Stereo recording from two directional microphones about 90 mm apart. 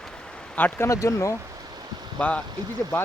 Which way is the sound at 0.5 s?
20° left (ahead or behind).